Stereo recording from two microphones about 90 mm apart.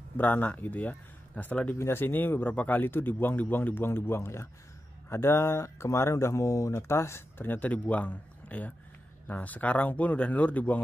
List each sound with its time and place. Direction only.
0.2 s speech: 20° left (ahead or behind)
1.8 s speech: 25° left (ahead or behind)